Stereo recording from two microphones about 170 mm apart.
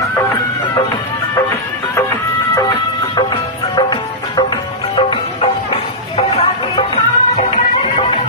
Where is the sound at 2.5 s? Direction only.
25° left (ahead or behind).